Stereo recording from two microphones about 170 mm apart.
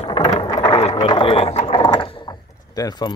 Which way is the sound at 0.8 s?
35° left (ahead or behind).